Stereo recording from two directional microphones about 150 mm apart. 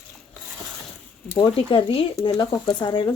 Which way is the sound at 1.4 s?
35° left (ahead or behind).